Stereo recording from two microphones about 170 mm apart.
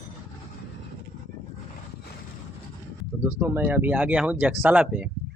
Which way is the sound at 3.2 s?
15° right (ahead or behind).